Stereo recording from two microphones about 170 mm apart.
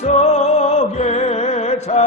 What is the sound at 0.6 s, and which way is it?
Music, 40° left (ahead or behind).